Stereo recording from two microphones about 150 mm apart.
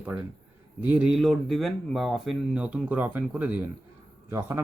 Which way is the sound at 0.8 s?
10° right (ahead or behind).